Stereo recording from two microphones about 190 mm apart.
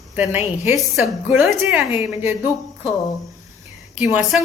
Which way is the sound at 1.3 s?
Centre (ahead or behind).